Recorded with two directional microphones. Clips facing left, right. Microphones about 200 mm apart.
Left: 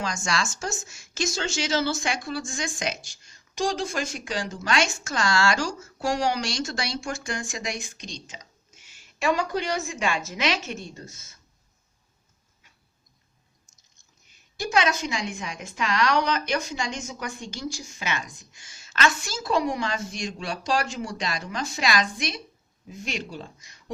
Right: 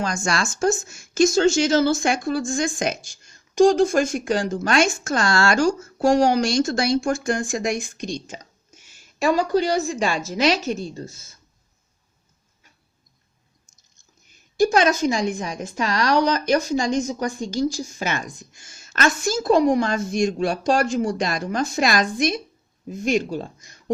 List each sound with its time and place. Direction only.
0.0 s a woman's voice: 50° right (ahead or behind); by 11.3 s 35° right (ahead or behind)
14.5 s a woman's voice: 45° right (ahead or behind)